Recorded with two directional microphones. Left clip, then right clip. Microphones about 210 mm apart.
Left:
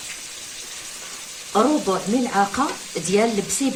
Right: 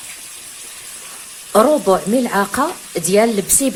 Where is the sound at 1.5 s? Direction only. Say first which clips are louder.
Right 7 dB; 50° right (ahead or behind).